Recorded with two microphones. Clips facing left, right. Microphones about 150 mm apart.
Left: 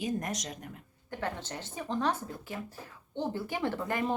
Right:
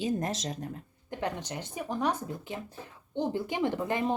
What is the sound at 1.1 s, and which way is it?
Speech, 15° right (ahead or behind).